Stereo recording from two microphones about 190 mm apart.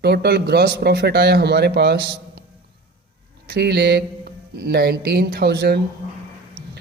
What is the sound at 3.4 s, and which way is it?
Speech, 55° right (ahead or behind).